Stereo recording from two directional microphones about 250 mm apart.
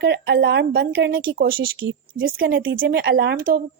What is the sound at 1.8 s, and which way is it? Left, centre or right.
Speech, right.